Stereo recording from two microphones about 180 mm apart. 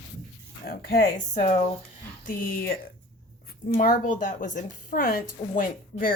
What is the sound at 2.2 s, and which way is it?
Speech, 55° left (ahead or behind).